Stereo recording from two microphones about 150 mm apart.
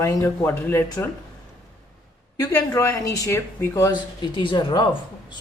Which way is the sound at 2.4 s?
25° left (ahead or behind).